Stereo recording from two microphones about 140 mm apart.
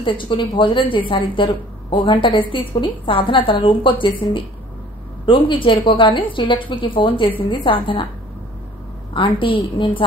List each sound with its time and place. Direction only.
0.0 s speech: 35° left (ahead or behind)
9.1 s speech: 35° left (ahead or behind)